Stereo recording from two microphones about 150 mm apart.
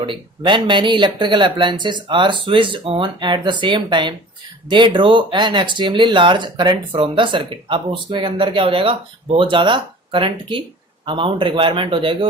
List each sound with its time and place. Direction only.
0.0 s speech: 35° right (ahead or behind)